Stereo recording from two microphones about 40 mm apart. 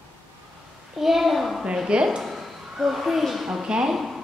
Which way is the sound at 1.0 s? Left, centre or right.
Centre.